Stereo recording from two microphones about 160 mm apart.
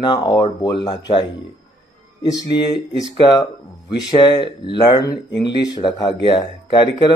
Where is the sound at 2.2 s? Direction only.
25° left (ahead or behind).